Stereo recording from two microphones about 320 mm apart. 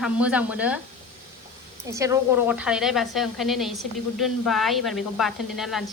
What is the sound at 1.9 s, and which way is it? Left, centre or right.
Speech, centre.